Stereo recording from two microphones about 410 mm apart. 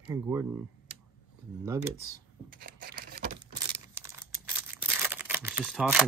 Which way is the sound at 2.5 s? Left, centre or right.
Right.